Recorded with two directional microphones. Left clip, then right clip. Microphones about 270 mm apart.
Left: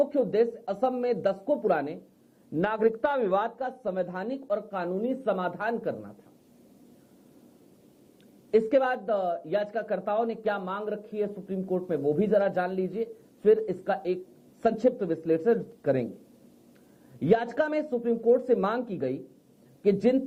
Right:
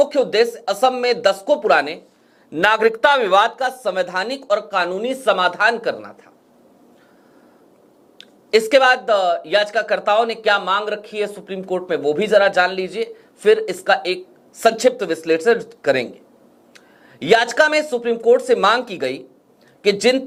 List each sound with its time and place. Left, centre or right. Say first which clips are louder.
0.0 s speech: right 9 dB; centre
1.4 s speech: right 10 dB; right
1.6 s speech: right 11 dB; centre
8.2 s speech: right 8 dB; centre
17.2 s a man's voice: right 11 dB; centre